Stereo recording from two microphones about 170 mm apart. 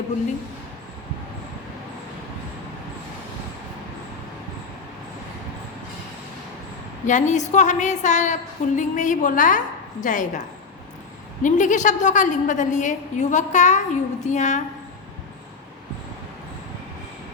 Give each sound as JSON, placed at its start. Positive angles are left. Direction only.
{"t": 7.1, "sound": "a woman's voice", "side_deg": 45}
{"t": 11.4, "sound": "a woman's voice", "side_deg": 45}